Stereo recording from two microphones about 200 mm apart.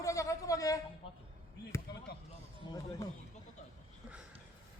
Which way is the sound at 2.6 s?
20° left (ahead or behind).